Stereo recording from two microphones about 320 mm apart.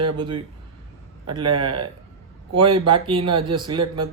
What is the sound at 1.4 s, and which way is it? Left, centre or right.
Speech, right.